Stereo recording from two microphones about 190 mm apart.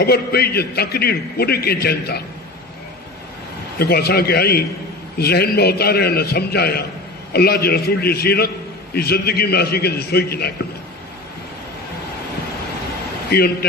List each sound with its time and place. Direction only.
0.0 s a man's voice: 55° left (ahead or behind)
3.7 s a man's voice: 55° left (ahead or behind)
13.3 s a man's voice: 55° left (ahead or behind)